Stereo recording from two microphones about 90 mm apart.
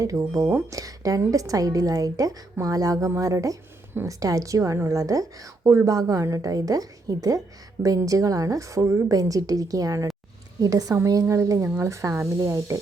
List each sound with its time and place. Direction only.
0.0 s speech: 40° right (ahead or behind)